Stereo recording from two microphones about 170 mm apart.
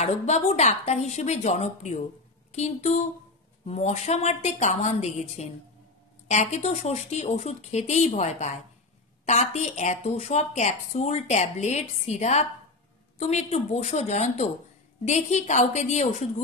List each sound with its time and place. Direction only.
0.0 s a woman's voice: 40° left (ahead or behind)